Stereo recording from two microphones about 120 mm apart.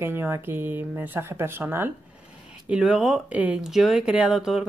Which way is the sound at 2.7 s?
5° right (ahead or behind).